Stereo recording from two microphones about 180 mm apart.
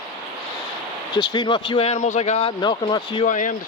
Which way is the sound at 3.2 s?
45° left (ahead or behind).